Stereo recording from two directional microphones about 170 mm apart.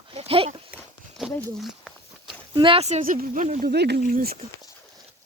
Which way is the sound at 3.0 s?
55° right (ahead or behind).